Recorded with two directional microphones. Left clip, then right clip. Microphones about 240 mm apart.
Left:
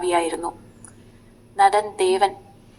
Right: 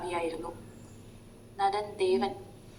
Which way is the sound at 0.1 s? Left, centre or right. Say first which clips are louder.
Left 12 dB; left.